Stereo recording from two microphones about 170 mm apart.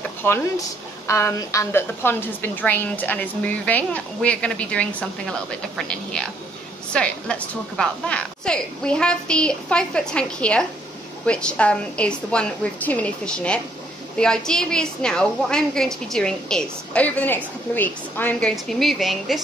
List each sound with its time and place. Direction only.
0.2 s a woman's voice: 15° left (ahead or behind)